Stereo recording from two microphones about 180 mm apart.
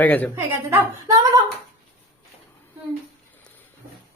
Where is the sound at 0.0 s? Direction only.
10° left (ahead or behind).